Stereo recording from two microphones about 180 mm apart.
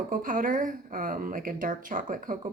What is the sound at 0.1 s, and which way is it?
A woman's voice, 50° right (ahead or behind).